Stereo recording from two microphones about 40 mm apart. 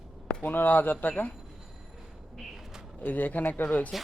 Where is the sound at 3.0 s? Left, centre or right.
Left.